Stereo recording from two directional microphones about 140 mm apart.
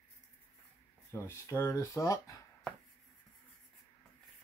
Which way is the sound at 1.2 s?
20° left (ahead or behind).